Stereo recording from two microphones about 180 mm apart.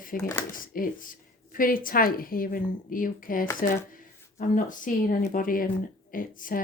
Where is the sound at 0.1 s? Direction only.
50° left (ahead or behind).